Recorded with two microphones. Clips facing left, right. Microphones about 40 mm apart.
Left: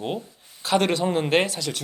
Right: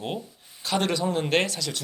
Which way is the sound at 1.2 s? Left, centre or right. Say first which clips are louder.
Left 3 dB; centre.